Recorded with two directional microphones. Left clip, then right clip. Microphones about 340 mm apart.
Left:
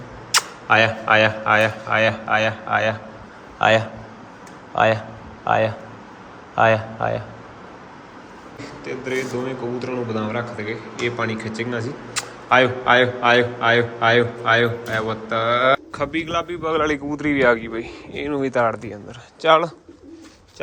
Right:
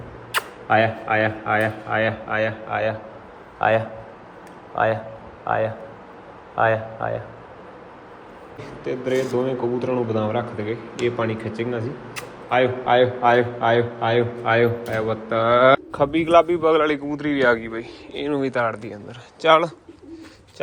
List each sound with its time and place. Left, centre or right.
0.3 s speech: centre
8.8 s speech: centre
16.6 s speech: centre